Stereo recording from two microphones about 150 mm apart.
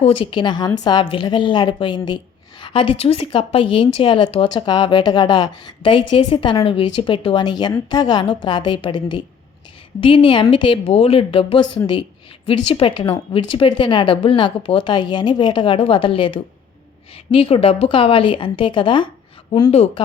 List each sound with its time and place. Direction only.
0.0 s a woman's voice: 35° left (ahead or behind)